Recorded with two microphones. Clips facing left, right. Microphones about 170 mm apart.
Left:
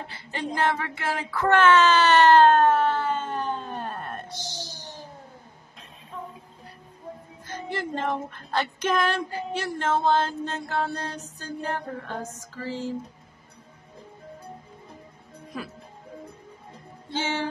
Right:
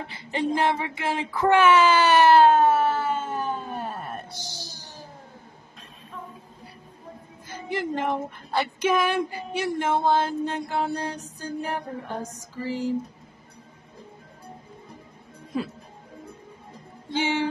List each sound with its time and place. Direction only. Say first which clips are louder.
0.1 s speech: right 8 dB; 20° right (ahead or behind)
0.6 s wail: right 1 dB; 20° right (ahead or behind)
7.4 s speech: right 3 dB; 15° right (ahead or behind)
17.1 s speech: right 4 dB; 15° right (ahead or behind)